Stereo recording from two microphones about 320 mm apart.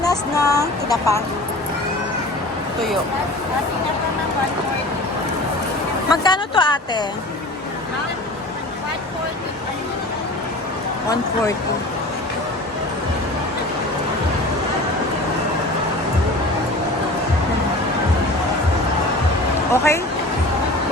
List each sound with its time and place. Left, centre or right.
0.0 s a sound: centre
6.1 s a woman's voice: centre
19.7 s a woman's voice: centre